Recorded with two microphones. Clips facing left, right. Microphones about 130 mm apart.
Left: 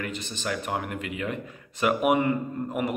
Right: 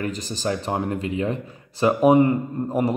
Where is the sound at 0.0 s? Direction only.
35° right (ahead or behind).